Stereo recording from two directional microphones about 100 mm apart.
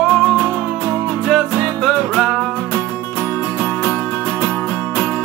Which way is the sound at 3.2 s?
25° left (ahead or behind).